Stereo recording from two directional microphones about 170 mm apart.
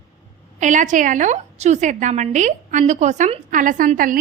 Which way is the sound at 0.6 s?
45° right (ahead or behind).